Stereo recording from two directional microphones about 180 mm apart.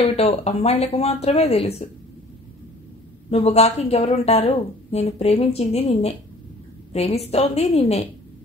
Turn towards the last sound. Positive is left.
turn(degrees=35)  # may be behind; listen again after turning